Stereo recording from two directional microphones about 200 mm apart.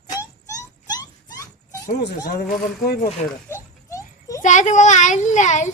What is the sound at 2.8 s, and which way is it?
Speech, 50° left (ahead or behind).